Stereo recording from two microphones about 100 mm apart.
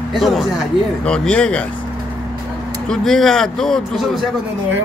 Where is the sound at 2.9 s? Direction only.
5° left (ahead or behind).